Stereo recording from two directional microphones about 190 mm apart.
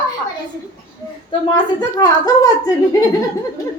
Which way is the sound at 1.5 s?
20° left (ahead or behind).